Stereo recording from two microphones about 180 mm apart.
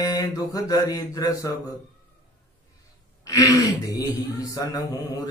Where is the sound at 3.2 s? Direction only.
20° left (ahead or behind).